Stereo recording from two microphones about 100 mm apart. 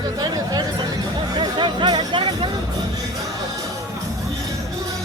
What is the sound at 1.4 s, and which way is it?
Music, 50° right (ahead or behind).